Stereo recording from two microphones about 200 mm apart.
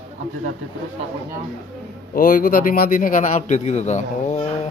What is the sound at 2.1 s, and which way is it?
A man's voice, 45° left (ahead or behind).